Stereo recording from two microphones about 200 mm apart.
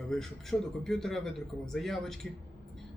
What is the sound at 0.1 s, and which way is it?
A man's voice, centre (ahead or behind).